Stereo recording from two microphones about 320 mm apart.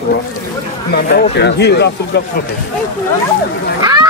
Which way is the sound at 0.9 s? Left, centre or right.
Left.